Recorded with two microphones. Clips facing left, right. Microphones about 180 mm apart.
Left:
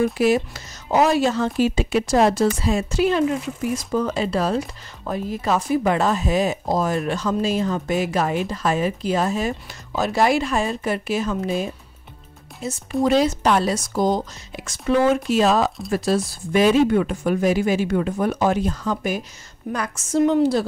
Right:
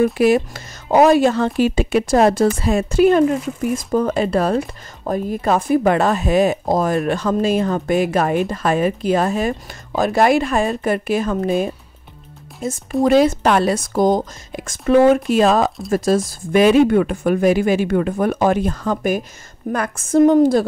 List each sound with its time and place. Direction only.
0.2 s speech: 55° right (ahead or behind)
16.3 s speech: 60° right (ahead or behind)